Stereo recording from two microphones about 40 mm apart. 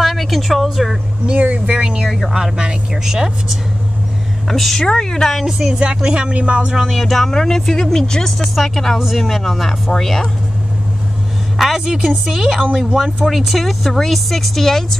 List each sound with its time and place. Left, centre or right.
0.0 s speech: centre
1.2 s speech: right
2.0 s a woman's voice: centre
2.3 s speech: centre
4.5 s speech: centre
5.4 s a woman's voice: centre
5.7 s speech: right
6.8 s speech: centre
8.9 s a woman's voice: centre
11.5 s a sound: centre
11.8 s a woman's voice: centre